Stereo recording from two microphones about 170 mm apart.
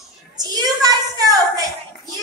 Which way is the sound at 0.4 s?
20° right (ahead or behind).